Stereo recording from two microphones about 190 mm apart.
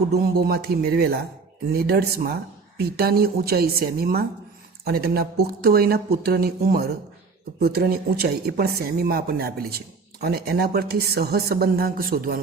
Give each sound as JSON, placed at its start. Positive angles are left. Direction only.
{"t": 0.1, "sound": "speech", "side_deg": -55}